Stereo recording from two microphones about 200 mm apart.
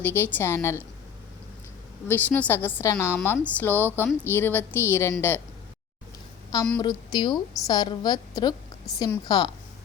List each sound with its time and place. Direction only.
0.0 s a woman's voice: 10° left (ahead or behind)
2.0 s a woman's voice: 10° left (ahead or behind)
6.7 s a woman's voice: 20° left (ahead or behind)